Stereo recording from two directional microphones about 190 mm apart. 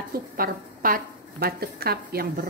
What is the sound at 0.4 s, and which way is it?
A woman's voice, 50° right (ahead or behind).